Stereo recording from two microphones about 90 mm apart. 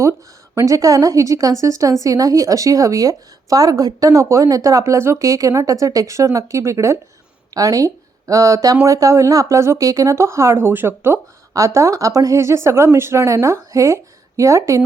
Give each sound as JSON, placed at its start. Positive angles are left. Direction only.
{"t": 0.0, "sound": "speech", "side_deg": -35}